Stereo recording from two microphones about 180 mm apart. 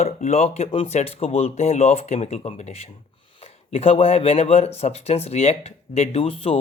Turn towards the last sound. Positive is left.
turn(degrees=35)  # may be behind; listen again after turning